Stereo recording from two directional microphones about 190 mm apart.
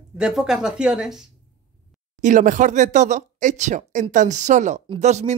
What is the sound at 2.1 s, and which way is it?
Speech, 40° right (ahead or behind).